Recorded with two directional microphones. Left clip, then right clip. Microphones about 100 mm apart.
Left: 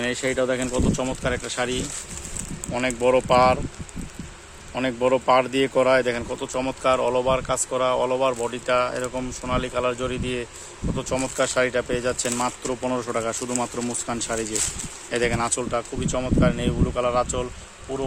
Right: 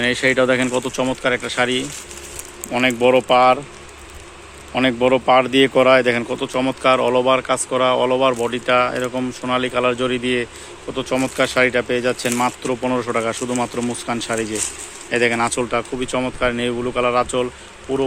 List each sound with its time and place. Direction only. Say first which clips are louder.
0.1 s speech: right 8 dB; 15° right (ahead or behind)
0.9 s speech: right 6 dB; 5° right (ahead or behind)
4.7 s speech: right 5 dB; 10° right (ahead or behind); by 13.4 s 5° left (ahead or behind)
13.4 s speech: right 5 dB; 20° left (ahead or behind)
15.7 s speech: right 5 dB; 10° right (ahead or behind)